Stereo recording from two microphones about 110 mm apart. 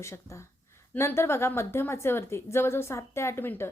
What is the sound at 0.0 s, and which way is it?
Speech, 25° left (ahead or behind).